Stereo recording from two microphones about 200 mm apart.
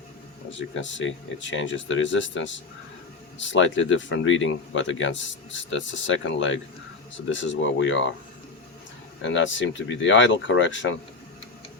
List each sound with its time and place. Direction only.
0.5 s speech: 70° left (ahead or behind)
9.2 s speech: 70° left (ahead or behind)